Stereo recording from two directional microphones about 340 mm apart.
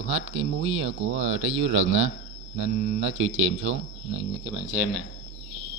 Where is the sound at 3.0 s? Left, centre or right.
Right.